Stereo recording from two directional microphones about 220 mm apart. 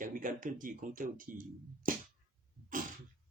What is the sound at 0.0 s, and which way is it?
Speech, 40° right (ahead or behind).